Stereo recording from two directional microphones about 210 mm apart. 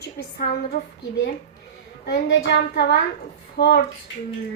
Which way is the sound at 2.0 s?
50° left (ahead or behind).